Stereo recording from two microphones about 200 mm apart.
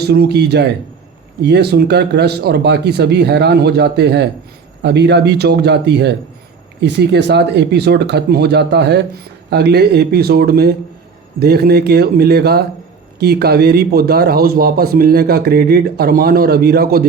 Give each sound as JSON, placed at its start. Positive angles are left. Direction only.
{"t": 0.0, "sound": "a man's voice", "side_deg": -55}